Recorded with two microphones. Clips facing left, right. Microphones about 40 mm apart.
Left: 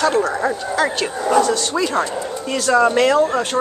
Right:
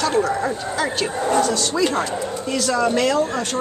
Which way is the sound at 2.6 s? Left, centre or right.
Left.